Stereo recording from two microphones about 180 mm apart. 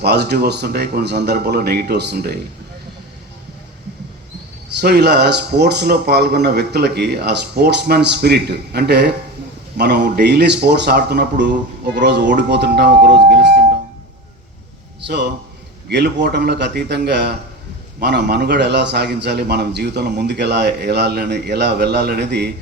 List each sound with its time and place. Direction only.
0.0 s a man's voice: 65° right (ahead or behind)
4.8 s a man's voice: 65° right (ahead or behind)
15.0 s a man's voice: 70° right (ahead or behind)